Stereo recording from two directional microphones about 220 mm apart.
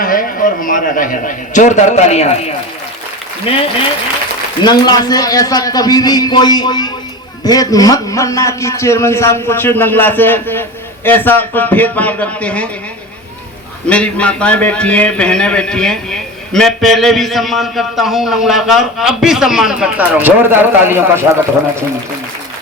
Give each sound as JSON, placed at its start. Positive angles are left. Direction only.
{"t": 0.0, "sound": "a man's voice", "side_deg": 40}
{"t": 13.8, "sound": "a man's voice", "side_deg": 5}